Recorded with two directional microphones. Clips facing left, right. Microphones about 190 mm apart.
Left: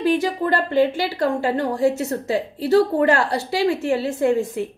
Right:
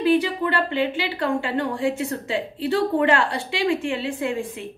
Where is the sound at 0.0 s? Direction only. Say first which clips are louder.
Even; 45° left (ahead or behind).